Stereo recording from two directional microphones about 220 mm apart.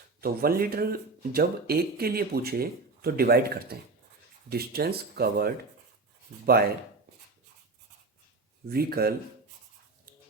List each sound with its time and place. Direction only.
0.2 s speech: 45° right (ahead or behind)
8.6 s speech: 45° right (ahead or behind)